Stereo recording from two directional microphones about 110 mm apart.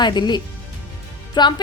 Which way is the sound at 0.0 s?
40° left (ahead or behind).